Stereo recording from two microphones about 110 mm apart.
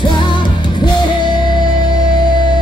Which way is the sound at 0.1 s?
45° left (ahead or behind).